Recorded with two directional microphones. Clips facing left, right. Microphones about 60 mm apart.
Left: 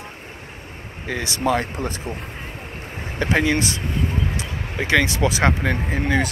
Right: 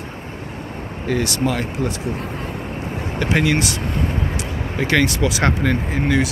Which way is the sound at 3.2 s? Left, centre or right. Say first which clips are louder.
Right 1 dB; left.